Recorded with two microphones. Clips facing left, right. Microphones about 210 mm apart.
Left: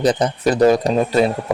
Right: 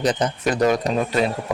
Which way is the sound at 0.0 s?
35° left (ahead or behind).